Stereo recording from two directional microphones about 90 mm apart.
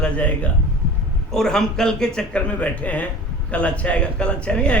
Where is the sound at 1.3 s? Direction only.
5° left (ahead or behind).